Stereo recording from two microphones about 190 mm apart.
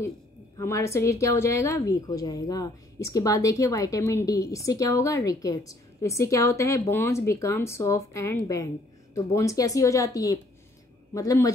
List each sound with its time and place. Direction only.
0.6 s a woman's voice: 15° left (ahead or behind)